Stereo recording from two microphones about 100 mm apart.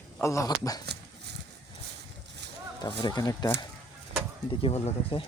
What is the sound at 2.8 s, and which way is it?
Speech, 50° left (ahead or behind).